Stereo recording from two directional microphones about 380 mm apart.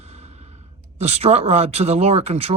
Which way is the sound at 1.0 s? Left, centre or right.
Centre.